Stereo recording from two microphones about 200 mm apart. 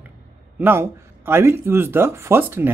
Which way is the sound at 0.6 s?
10° right (ahead or behind).